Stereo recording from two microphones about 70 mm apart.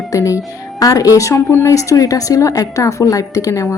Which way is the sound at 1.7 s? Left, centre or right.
Left.